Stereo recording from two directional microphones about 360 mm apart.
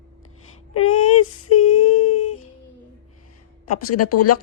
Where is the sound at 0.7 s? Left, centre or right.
Left.